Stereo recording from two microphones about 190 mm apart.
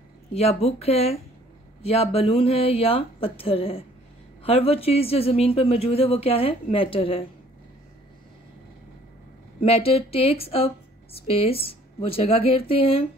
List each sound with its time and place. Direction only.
0.3 s speech: 35° left (ahead or behind)
9.6 s speech: 30° left (ahead or behind)